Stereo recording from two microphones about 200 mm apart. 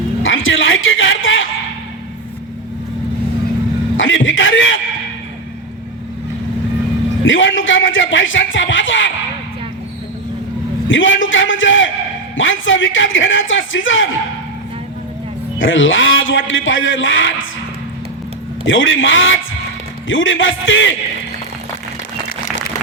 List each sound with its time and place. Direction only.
0.2 s a sound: 75° left (ahead or behind)
3.9 s a sound: 75° left (ahead or behind)
7.3 s a man's voice: 70° left (ahead or behind)
10.8 s a man's voice: 75° left (ahead or behind)
15.5 s a man's voice: 75° left (ahead or behind)
18.6 s a man's voice: 75° left (ahead or behind)